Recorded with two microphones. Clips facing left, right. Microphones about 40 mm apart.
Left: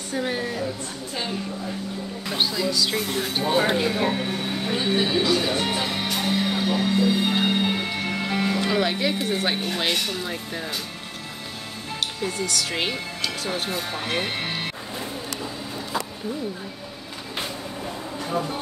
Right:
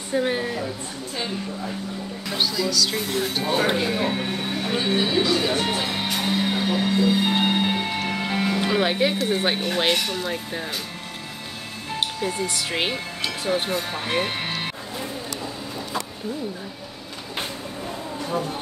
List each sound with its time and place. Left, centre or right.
0.1 s a woman's voice: centre
2.2 s speech: centre
2.9 s speech: centre
5.9 s music: centre
9.3 s speech: centre
12.4 s speech: right
13.7 s speech: centre